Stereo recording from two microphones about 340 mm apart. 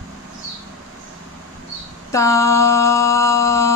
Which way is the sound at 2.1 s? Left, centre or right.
Centre.